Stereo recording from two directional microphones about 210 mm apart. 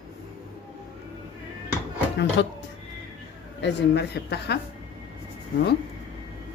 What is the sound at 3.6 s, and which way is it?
Speech, 55° left (ahead or behind).